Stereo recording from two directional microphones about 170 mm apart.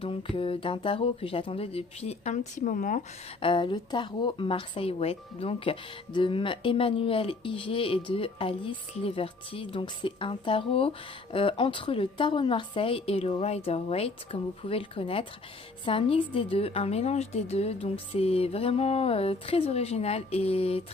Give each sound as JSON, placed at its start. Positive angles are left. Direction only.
{"t": 0.0, "sound": "a woman's voice", "side_deg": 30}
{"t": 3.3, "sound": "a woman's voice", "side_deg": 30}